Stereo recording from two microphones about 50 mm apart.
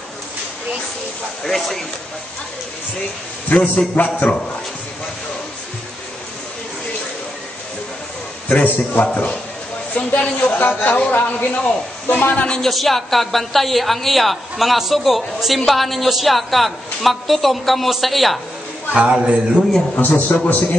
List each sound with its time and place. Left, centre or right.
1.4 s a man's voice: centre
3.7 s a man's voice: left
8.5 s a man's voice: left
9.0 s a man's voice: left
10.1 s a man's voice: left
12.5 s a woman's voice: centre
18.9 s speech: right
20.0 s a man's voice: left